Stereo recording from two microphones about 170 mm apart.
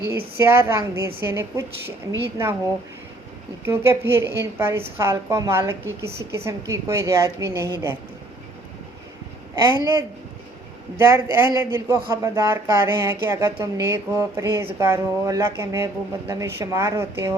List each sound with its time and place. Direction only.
0.1 s speech: 15° right (ahead or behind)
3.7 s speech: 15° right (ahead or behind)
10.9 s speech: 15° right (ahead or behind)